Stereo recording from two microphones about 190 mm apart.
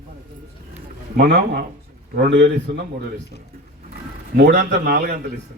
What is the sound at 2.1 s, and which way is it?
Speech, 70° right (ahead or behind).